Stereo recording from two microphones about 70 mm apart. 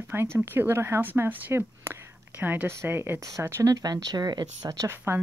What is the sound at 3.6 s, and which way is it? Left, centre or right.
Speech, right.